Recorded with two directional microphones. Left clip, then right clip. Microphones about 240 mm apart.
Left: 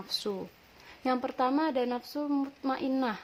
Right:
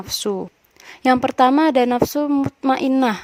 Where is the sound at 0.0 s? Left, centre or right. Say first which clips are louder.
Right 11 dB; right.